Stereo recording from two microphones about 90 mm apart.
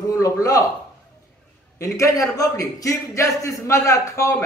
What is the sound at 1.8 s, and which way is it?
A man's voice, 40° left (ahead or behind).